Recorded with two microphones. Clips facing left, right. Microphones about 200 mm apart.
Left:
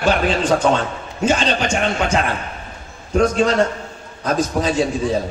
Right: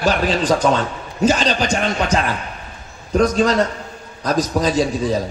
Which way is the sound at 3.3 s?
35° right (ahead or behind).